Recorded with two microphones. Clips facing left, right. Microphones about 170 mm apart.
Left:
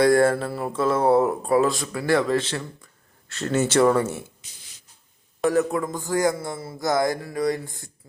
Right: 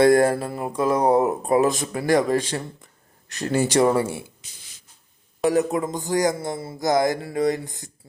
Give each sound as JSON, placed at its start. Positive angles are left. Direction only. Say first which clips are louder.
{"t": 0.0, "sound": "speech", "louder": "right 1 dB", "side_deg": -20}
{"t": 2.8, "sound": "a sound", "louder": "right 2 dB", "side_deg": -15}
{"t": 3.7, "sound": "speech", "louder": "left 1 dB", "side_deg": -15}
{"t": 5.5, "sound": "speech", "louder": "right 1 dB", "side_deg": -20}